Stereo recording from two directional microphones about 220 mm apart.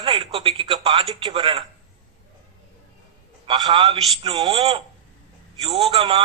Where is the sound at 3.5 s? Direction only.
20° right (ahead or behind).